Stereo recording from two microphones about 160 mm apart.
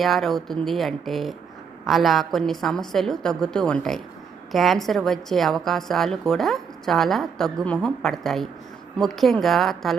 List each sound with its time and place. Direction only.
0.0 s a woman's voice: centre (ahead or behind)